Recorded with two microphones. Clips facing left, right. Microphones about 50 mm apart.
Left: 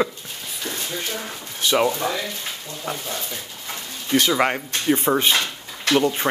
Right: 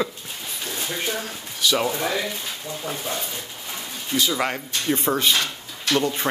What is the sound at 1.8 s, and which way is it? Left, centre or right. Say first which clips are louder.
Speech: left 2 dB; centre.